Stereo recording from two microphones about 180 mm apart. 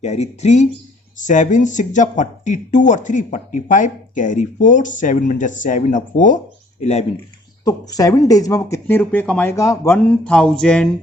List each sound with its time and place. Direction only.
0.0 s speech: 40° left (ahead or behind)
7.6 s speech: 20° left (ahead or behind); by 10.8 s 5° left (ahead or behind)